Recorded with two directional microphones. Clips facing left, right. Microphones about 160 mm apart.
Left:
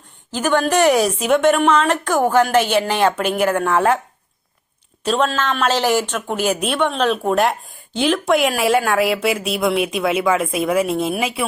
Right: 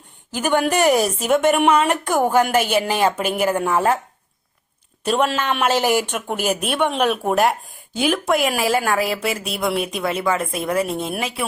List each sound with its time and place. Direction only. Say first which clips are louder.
0.3 s a woman's voice: left 1 dB; 10° right (ahead or behind)
5.0 s a woman's voice: left 1 dB; 10° right (ahead or behind)